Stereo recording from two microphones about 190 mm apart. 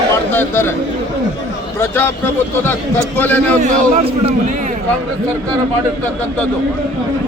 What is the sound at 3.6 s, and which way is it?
Speech, 40° right (ahead or behind).